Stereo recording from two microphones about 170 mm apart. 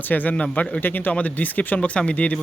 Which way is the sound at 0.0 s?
10° left (ahead or behind).